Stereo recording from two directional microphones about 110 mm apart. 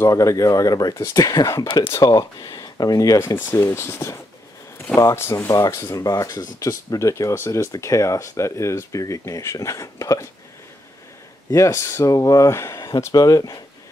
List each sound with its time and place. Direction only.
0.0 s speech: 30° left (ahead or behind)
1.7 s speech: 45° left (ahead or behind)
2.0 s speech: 30° left (ahead or behind)
11.5 s speech: 25° left (ahead or behind)